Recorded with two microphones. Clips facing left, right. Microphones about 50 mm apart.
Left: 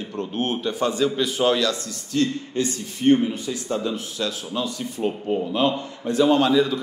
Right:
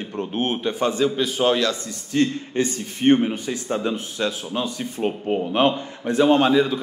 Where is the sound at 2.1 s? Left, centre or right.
Right.